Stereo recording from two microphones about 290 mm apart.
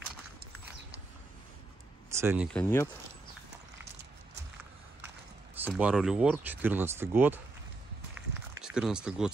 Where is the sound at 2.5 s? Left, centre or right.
Centre.